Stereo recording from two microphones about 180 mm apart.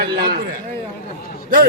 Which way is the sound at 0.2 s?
55° right (ahead or behind).